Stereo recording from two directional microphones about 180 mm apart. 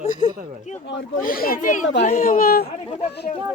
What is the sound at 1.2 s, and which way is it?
Speech, 55° left (ahead or behind).